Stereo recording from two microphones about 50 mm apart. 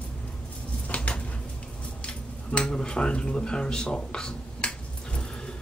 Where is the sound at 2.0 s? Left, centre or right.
Left.